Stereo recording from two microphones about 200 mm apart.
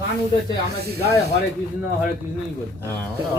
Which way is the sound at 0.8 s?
55° right (ahead or behind).